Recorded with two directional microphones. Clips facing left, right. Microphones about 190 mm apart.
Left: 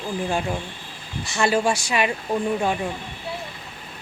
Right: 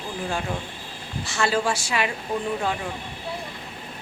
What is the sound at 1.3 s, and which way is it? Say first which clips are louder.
Speech: left 3 dB; 15° left (ahead or behind).